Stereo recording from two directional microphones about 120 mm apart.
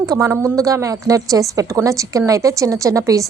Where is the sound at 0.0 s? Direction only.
30° right (ahead or behind).